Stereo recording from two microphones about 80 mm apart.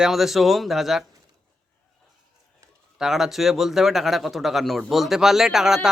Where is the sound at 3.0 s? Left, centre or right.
Centre.